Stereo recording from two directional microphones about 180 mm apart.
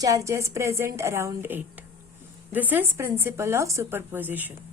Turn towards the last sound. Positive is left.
turn(degrees=-10)  # may be behind; listen again after turning